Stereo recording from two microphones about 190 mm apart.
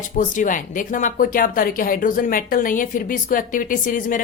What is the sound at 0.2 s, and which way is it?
Speech, 45° left (ahead or behind).